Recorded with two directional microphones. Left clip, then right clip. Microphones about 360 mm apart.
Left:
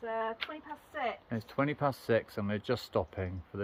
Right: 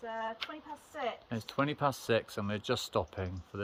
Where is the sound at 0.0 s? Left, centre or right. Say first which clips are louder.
Left 3 dB; centre.